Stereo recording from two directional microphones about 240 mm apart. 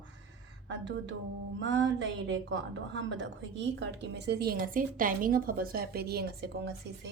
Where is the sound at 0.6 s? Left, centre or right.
Right.